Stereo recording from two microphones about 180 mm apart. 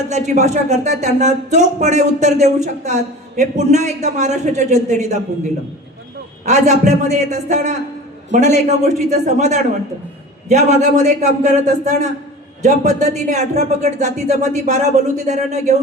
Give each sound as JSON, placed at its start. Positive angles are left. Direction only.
{"t": 0.1, "sound": "speech", "side_deg": -40}
{"t": 6.4, "sound": "speech", "side_deg": -40}